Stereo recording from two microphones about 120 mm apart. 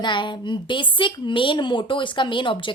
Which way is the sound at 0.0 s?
40° left (ahead or behind).